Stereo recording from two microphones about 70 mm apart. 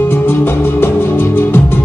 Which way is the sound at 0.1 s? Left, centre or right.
Left.